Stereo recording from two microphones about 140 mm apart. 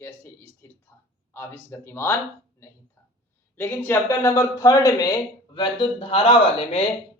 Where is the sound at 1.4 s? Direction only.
15° left (ahead or behind).